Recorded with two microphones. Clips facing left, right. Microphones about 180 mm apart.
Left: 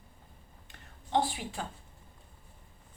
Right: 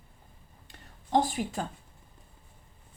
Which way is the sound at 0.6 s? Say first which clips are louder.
Right 4 dB; 40° right (ahead or behind).